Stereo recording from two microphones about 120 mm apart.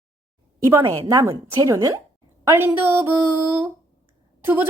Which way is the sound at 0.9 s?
25° right (ahead or behind).